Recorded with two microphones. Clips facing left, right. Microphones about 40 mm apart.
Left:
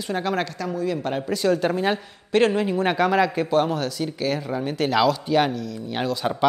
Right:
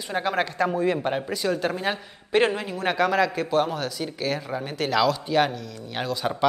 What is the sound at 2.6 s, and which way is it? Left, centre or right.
A man's voice, centre.